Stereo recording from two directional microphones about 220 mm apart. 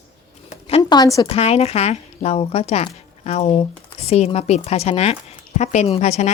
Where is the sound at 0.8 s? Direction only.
15° left (ahead or behind).